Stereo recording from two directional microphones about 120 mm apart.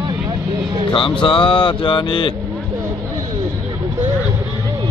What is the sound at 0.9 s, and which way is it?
Speech, 45° left (ahead or behind).